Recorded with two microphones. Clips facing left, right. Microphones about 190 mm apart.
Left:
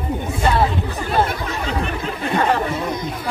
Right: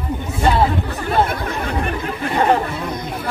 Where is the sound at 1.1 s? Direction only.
55° right (ahead or behind).